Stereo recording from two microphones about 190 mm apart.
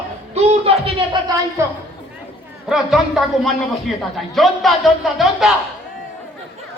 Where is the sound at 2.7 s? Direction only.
Centre (ahead or behind).